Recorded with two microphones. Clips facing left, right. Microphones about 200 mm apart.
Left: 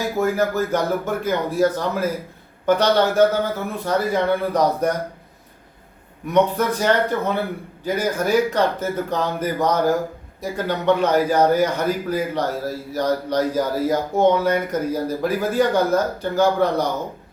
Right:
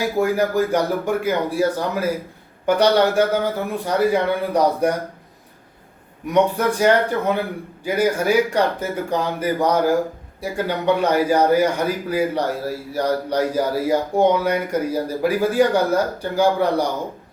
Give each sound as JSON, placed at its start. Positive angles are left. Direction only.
{"t": 0.2, "sound": "a man's voice", "side_deg": -15}
{"t": 6.2, "sound": "a man's voice", "side_deg": -15}